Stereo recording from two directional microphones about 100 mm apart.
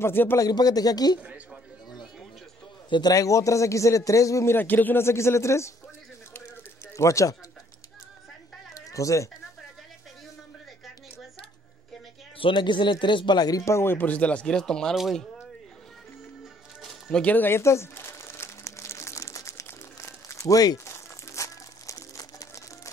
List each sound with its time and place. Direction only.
0.0 s a man's voice: 25° left (ahead or behind)
0.4 s a man's voice: 40° left (ahead or behind)
1.2 s speech: 10° right (ahead or behind)
2.9 s a man's voice: 40° left (ahead or behind)
4.6 s a man's voice: 20° left (ahead or behind)
7.0 s a man's voice: 30° left (ahead or behind)
8.7 s a sound: 35° left (ahead or behind)
12.4 s a man's voice: 55° left (ahead or behind); by 15.4 s centre (ahead or behind)
16.8 s crumpling: 10° left (ahead or behind); by 22.5 s 35° left (ahead or behind)